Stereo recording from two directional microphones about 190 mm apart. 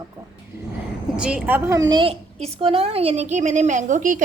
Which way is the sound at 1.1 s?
5° right (ahead or behind).